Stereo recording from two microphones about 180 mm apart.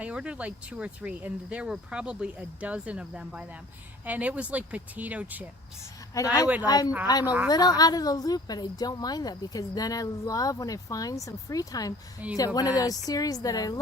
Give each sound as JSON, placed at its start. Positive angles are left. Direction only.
{"t": 0.0, "sound": "speech", "side_deg": -5}
{"t": 6.2, "sound": "speech", "side_deg": 15}
{"t": 12.2, "sound": "speech", "side_deg": -10}
{"t": 12.5, "sound": "speech", "side_deg": 20}